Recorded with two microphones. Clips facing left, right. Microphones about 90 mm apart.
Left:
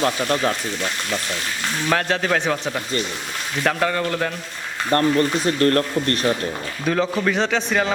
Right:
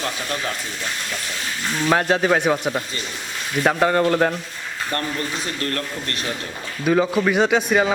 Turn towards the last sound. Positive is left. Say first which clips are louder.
# right 3 dB
turn(degrees=-10)  # may be behind; listen again after turning